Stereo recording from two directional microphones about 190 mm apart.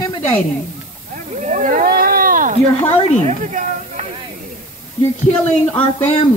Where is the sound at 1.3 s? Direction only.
40° right (ahead or behind).